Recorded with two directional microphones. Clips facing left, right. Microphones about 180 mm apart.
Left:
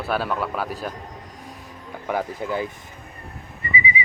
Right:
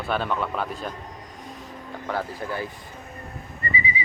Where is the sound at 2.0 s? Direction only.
15° left (ahead or behind).